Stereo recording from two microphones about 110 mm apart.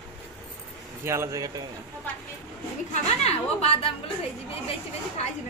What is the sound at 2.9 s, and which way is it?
A woman's voice, 70° left (ahead or behind).